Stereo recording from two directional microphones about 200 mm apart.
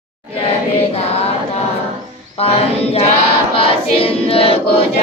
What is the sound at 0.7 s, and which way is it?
Music, 30° left (ahead or behind).